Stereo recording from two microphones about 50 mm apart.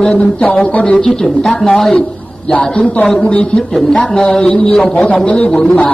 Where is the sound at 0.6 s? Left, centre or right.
Left.